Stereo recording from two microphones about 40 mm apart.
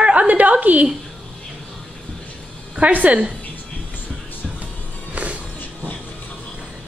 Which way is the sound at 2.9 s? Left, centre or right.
Right.